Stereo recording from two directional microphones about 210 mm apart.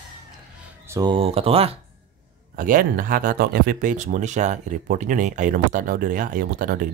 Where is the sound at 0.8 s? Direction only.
15° right (ahead or behind).